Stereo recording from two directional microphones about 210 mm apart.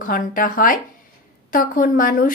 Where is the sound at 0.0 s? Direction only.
40° left (ahead or behind).